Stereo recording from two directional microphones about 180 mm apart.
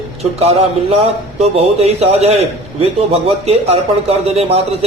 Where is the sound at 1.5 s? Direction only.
35° right (ahead or behind).